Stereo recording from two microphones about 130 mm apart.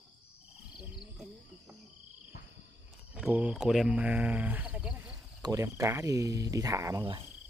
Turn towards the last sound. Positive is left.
turn(degrees=-25)  # may be behind; listen again after turning